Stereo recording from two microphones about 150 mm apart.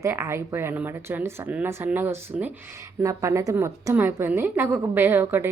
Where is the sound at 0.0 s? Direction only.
15° right (ahead or behind).